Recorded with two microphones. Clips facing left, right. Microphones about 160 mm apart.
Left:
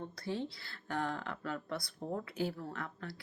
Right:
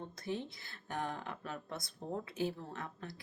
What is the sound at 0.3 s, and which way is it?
Speech, 20° right (ahead or behind).